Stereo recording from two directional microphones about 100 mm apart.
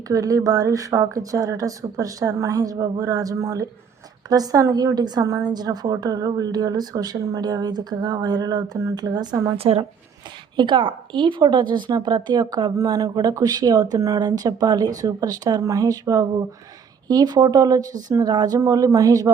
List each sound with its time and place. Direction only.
0.1 s speech: 35° right (ahead or behind)
9.6 s a woman's voice: 75° right (ahead or behind)
10.6 s speech: 55° right (ahead or behind); by 19.3 s 35° right (ahead or behind)